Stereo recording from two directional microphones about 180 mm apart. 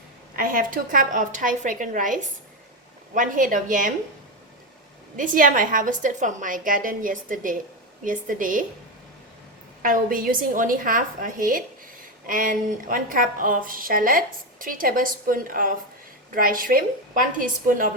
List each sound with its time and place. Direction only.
0.3 s a woman's voice: 50° right (ahead or behind)
5.1 s a woman's voice: 50° right (ahead or behind)
9.8 s a woman's voice: 50° right (ahead or behind)